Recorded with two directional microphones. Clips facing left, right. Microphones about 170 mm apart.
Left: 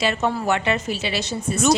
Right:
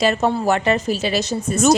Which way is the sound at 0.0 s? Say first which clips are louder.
Right 4 dB; 40° right (ahead or behind).